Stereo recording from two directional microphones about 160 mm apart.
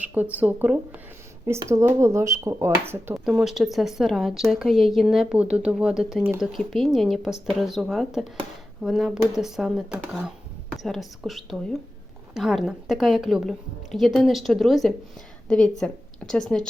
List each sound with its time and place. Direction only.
0.0 s speech: 10° right (ahead or behind)
3.2 s a woman's voice: 5° right (ahead or behind)